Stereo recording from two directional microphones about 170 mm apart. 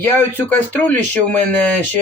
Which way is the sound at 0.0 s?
10° left (ahead or behind).